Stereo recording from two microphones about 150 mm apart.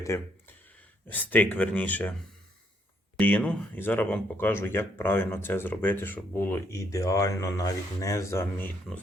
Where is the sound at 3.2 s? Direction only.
10° left (ahead or behind).